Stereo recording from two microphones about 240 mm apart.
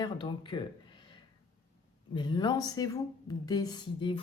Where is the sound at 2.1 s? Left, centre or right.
Centre.